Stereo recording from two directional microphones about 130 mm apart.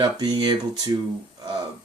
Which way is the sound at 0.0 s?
35° right (ahead or behind).